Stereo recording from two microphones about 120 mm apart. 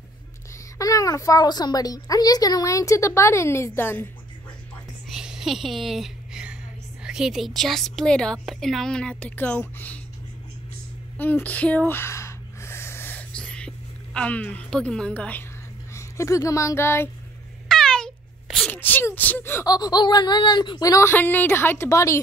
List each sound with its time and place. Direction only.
0.7 s speech: 30° left (ahead or behind)
5.0 s a woman's voice: 5° right (ahead or behind); by 9.9 s 15° left (ahead or behind)
11.1 s speech: 15° left (ahead or behind)
11.9 s a sound: 20° left (ahead or behind)
15.9 s speech: 25° left (ahead or behind)
17.6 s sneeze: 5° left (ahead or behind)
18.7 s speech: 15° left (ahead or behind)
19.6 s speech: 35° left (ahead or behind)
21.1 s speech: 15° left (ahead or behind)